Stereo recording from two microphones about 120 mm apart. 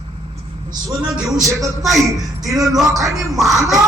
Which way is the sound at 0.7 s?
25° right (ahead or behind).